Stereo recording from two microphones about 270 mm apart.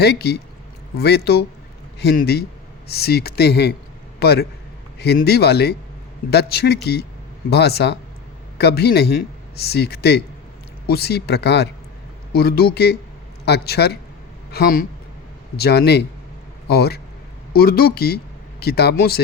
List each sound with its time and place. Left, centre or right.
0.0 s a man's voice: left